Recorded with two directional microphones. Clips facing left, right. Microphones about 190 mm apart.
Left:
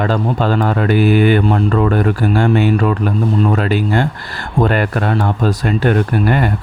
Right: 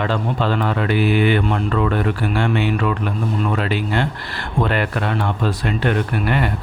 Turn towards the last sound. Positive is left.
turn(degrees=40)  # may be behind; listen again after turning